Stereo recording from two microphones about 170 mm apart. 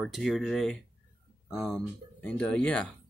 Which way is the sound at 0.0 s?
Centre (ahead or behind).